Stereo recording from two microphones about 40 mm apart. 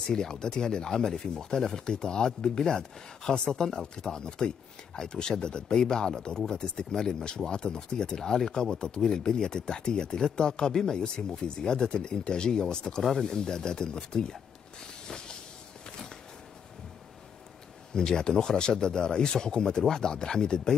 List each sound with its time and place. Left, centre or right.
0.0 s speech: centre
15.0 s hiss: left
17.9 s speech: centre